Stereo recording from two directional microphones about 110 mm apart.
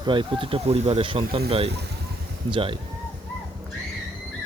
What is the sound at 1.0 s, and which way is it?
Speech, 50° right (ahead or behind).